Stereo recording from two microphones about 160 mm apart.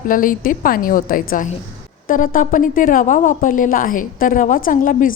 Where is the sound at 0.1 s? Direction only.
60° left (ahead or behind).